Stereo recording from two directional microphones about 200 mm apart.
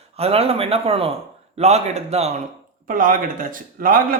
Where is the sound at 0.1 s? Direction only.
30° right (ahead or behind).